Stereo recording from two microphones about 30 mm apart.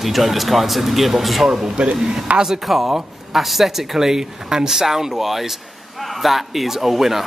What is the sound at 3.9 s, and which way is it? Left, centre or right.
Speech, centre.